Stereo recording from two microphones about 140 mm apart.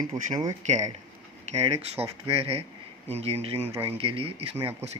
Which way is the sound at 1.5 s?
45° right (ahead or behind).